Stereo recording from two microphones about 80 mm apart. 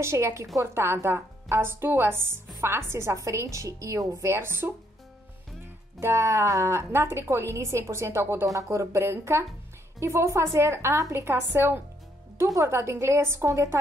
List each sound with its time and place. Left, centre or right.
0.0 s speech: right
5.9 s speech: right